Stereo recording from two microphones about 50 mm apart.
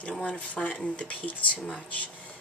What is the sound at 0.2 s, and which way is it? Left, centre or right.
Speech, left.